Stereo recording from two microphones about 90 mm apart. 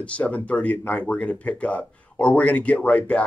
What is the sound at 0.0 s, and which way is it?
Speech, 15° left (ahead or behind).